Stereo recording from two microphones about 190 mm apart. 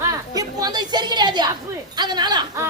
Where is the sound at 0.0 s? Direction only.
20° right (ahead or behind).